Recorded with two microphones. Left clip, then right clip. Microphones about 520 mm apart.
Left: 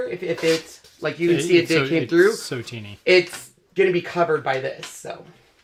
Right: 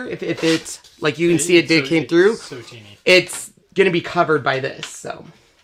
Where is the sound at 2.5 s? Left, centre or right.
Left.